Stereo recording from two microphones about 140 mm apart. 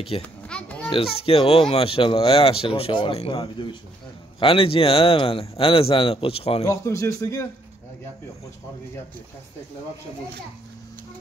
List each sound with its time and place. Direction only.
0.1 s a man's voice: 40° left (ahead or behind)
0.5 s a sound: 10° left (ahead or behind)
0.9 s a man's voice: 45° left (ahead or behind)
6.6 s speech: 20° left (ahead or behind)